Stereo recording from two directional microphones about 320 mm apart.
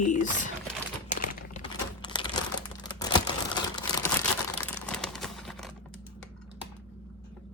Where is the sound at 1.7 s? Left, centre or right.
Centre.